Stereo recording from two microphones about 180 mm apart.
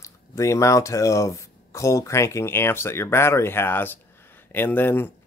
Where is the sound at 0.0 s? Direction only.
15° left (ahead or behind).